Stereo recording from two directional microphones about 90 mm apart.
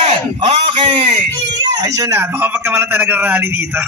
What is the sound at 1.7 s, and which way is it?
Speech, 45° right (ahead or behind).